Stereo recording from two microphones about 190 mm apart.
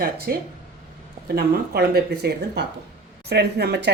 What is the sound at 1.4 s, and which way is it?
Speech, 55° right (ahead or behind).